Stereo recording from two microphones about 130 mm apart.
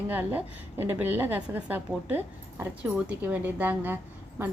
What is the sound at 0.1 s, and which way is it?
A woman's voice, 15° right (ahead or behind).